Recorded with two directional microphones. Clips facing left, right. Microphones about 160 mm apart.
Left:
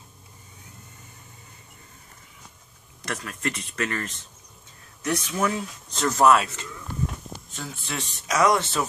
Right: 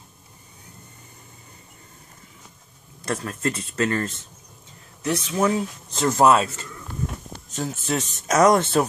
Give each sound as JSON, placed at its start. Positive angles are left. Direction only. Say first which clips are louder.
{"t": 3.0, "sound": "speech", "louder": "right 5 dB", "side_deg": -30}